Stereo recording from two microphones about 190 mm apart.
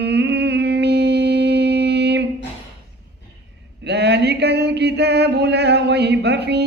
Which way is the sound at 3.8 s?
60° right (ahead or behind).